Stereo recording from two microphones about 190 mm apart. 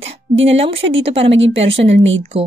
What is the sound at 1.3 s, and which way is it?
Speech, 75° right (ahead or behind).